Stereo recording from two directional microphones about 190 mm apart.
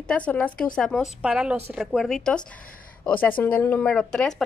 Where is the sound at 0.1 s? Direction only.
5° left (ahead or behind).